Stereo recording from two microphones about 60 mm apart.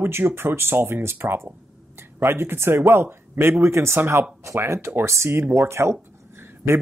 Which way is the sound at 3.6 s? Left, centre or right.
Right.